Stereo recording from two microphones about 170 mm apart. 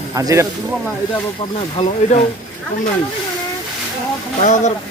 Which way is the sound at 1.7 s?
35° left (ahead or behind).